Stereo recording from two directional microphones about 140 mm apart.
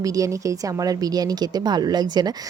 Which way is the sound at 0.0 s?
25° right (ahead or behind).